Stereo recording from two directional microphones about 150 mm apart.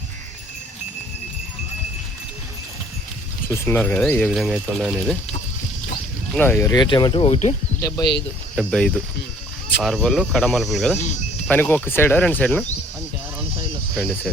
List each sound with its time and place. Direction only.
3.5 s speech: 15° left (ahead or behind); by 5.1 s centre (ahead or behind)
6.3 s speech: 10° left (ahead or behind)
6.7 s speech: 30° left (ahead or behind); by 7.5 s 45° left (ahead or behind)
7.8 s speech: 25° left (ahead or behind)
8.5 s speech: 5° left (ahead or behind)
10.9 s speech: 50° left (ahead or behind)
11.4 s speech: 10° left (ahead or behind)